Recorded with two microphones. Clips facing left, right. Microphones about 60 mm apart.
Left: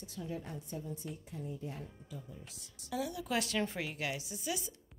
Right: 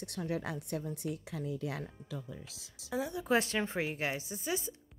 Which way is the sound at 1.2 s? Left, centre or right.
Right.